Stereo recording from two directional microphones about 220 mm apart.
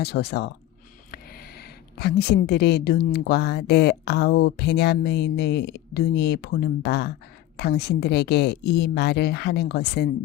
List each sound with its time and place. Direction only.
0.0 s a woman's voice: 45° left (ahead or behind)